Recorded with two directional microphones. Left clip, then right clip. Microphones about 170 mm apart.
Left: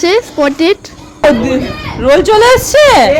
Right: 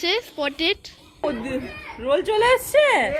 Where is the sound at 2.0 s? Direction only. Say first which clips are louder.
Left 13 dB; centre (ahead or behind).